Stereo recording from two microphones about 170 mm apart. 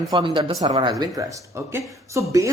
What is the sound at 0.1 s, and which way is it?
Speech, 30° right (ahead or behind).